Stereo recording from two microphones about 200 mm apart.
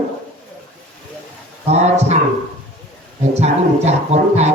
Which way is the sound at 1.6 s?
35° right (ahead or behind).